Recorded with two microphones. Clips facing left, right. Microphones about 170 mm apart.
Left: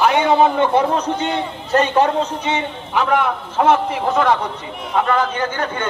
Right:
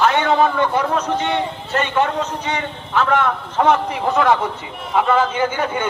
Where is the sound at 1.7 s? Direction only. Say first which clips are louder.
Left 4 dB; 35° left (ahead or behind).